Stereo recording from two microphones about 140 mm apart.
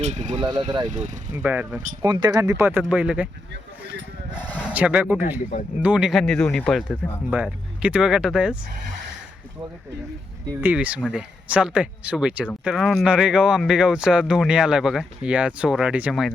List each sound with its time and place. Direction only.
0.0 s speech: 60° right (ahead or behind)
0.3 s speech: 30° right (ahead or behind)
0.9 s speech: 65° right (ahead or behind)
1.3 s speech: 15° right (ahead or behind)
2.0 s speech: 30° right (ahead or behind); by 3.2 s 10° right (ahead or behind)
4.6 s speech: 10° right (ahead or behind); by 7.2 s 10° left (ahead or behind)
7.3 s speech: 10° right (ahead or behind)
10.5 s speech: 15° right (ahead or behind)